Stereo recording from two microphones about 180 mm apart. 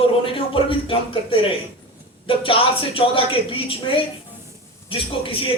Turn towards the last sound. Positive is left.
turn(degrees=30)  # may be behind; listen again after turning